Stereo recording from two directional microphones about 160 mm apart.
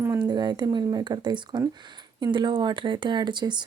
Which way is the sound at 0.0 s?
25° right (ahead or behind).